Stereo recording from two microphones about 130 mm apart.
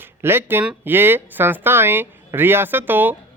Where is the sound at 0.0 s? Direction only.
15° right (ahead or behind).